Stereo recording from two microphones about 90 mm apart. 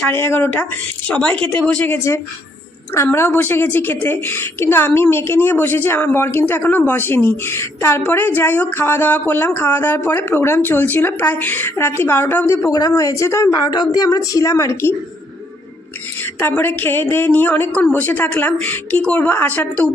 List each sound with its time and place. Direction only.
0.0 s a woman's voice: 25° left (ahead or behind)
2.9 s a woman's voice: 30° left (ahead or behind)
12.7 s a woman's voice: 40° left (ahead or behind)
16.2 s a woman's voice: 20° left (ahead or behind)